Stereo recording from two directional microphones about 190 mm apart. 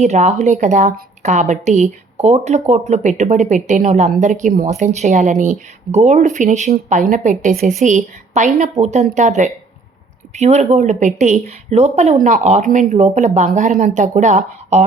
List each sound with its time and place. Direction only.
0.0 s a woman's voice: 35° right (ahead or behind)